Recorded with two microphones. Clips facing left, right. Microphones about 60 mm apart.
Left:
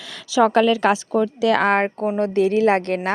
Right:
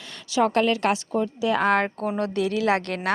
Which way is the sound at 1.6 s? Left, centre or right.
Left.